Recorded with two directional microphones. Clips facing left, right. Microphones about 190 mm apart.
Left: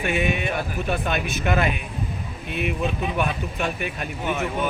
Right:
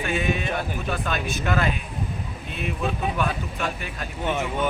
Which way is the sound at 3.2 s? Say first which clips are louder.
Left 2 dB; 20° left (ahead or behind).